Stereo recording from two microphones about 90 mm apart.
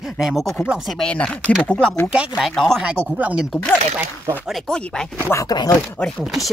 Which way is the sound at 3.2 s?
15° right (ahead or behind).